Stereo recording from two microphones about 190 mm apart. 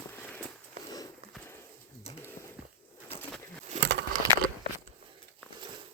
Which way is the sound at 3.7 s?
75° right (ahead or behind).